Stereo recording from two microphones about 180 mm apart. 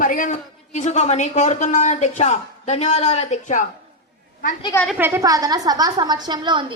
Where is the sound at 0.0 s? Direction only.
50° left (ahead or behind).